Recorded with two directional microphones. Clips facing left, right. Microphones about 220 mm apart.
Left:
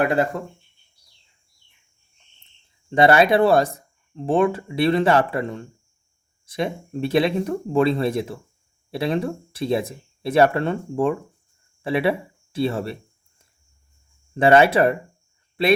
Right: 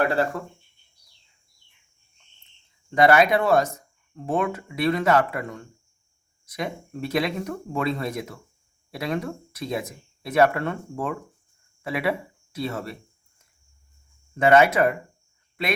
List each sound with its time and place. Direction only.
0.0 s speech: 20° left (ahead or behind)
2.9 s speech: 30° left (ahead or behind)
14.3 s speech: 30° left (ahead or behind)